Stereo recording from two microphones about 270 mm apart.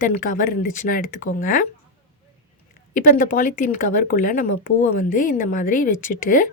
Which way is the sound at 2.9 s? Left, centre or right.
Left.